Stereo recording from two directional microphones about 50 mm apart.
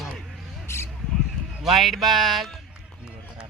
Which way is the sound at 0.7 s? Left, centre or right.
Left.